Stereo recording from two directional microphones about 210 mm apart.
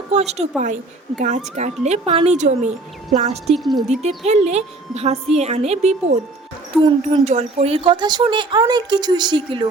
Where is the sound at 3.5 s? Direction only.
Centre (ahead or behind).